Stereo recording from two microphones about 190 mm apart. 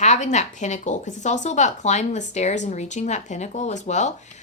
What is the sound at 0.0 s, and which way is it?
Speech, 40° left (ahead or behind).